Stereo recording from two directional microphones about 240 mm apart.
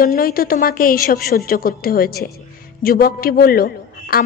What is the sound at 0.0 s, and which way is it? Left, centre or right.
A woman's voice, left.